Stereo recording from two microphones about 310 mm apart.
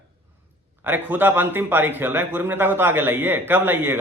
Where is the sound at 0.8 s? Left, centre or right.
Centre.